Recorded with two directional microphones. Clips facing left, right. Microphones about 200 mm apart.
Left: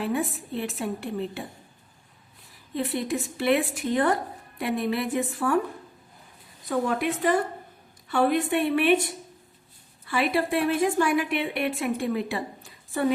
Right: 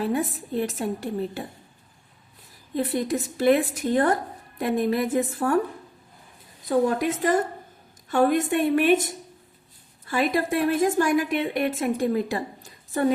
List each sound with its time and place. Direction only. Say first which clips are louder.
0.0 s speech: right 2 dB; 40° right (ahead or behind)
2.7 s speech: right 3 dB; 40° right (ahead or behind)
6.7 s a woman's voice: right 4 dB; 40° right (ahead or behind)
10.1 s a woman's voice: right 1 dB; 40° right (ahead or behind)